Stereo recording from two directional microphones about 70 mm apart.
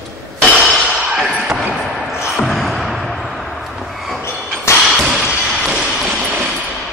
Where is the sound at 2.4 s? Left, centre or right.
Centre.